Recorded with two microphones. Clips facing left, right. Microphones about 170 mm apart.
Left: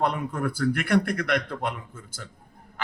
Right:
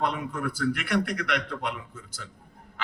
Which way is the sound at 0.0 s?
50° left (ahead or behind).